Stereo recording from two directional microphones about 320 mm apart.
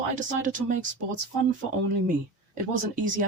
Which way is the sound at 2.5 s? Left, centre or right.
Right.